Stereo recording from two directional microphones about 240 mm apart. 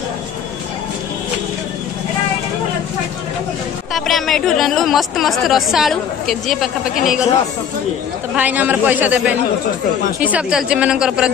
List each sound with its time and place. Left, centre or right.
3.9 s a woman's voice: centre
8.4 s a man's voice: centre
10.2 s a woman's voice: centre